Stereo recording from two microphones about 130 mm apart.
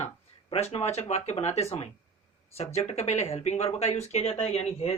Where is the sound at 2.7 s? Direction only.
55° left (ahead or behind).